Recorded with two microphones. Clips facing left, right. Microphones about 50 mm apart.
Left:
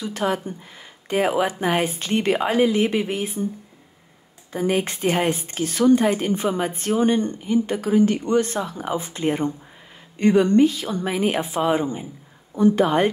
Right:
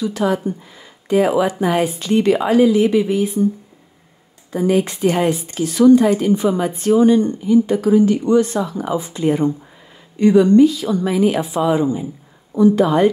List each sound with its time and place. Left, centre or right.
0.0 s speech: left
4.5 s speech: left